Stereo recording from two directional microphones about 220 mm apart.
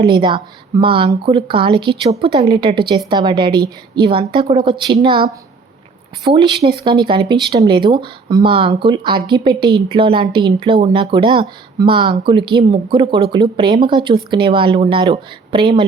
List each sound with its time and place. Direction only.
0.0 s speech: 20° right (ahead or behind)
6.3 s speech: 25° right (ahead or behind)